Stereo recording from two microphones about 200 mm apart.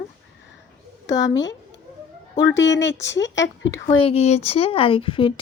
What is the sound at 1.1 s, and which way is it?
A woman's voice, 65° left (ahead or behind).